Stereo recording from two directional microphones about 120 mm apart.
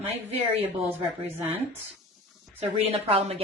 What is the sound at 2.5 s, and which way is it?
Speech, 55° right (ahead or behind).